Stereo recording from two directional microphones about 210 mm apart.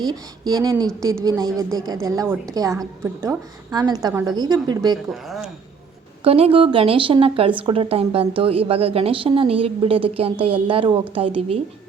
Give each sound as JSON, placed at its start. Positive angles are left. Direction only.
{"t": 0.1, "sound": "a woman's voice", "side_deg": -20}
{"t": 5.1, "sound": "speech", "side_deg": 0}
{"t": 6.2, "sound": "a woman's voice", "side_deg": -25}